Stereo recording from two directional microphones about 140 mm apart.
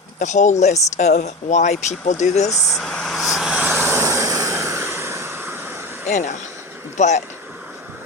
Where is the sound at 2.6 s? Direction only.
Centre (ahead or behind); by 6.1 s 15° right (ahead or behind).